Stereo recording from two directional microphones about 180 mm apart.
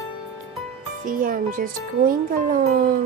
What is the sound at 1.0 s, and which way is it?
Speech, 50° right (ahead or behind).